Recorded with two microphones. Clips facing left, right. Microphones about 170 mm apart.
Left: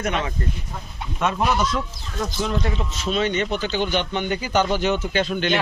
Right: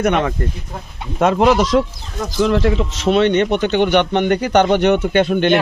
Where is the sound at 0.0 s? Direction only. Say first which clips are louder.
Right 9 dB; 60° right (ahead or behind).